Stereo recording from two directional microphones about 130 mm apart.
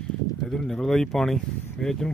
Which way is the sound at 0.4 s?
5° left (ahead or behind).